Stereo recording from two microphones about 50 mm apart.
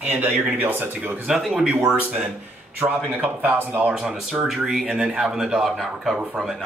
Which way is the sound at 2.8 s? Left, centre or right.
Right.